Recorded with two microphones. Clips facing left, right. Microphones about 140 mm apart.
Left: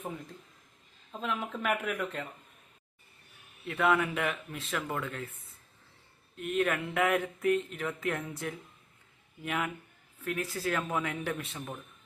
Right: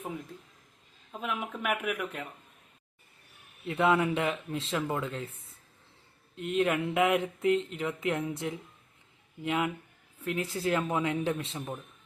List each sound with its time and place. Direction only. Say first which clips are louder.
1.1 s speech: even; 10° right (ahead or behind)
3.7 s speech: right 2 dB; 25° right (ahead or behind)
6.3 s speech: right 2 dB; 20° right (ahead or behind)